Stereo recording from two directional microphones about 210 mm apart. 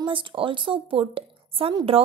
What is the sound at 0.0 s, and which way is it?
A woman's voice, 25° right (ahead or behind).